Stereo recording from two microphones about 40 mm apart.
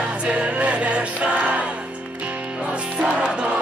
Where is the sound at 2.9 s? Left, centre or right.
Right.